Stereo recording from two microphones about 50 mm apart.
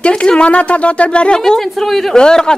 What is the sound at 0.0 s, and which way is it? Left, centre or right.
Speech, centre.